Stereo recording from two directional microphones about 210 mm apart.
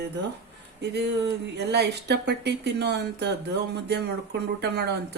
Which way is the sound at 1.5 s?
50° right (ahead or behind).